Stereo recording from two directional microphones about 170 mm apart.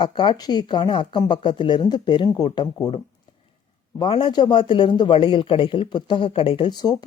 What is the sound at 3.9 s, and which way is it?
A man's voice, 30° left (ahead or behind).